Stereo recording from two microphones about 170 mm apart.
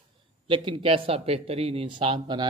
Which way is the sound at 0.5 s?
30° right (ahead or behind).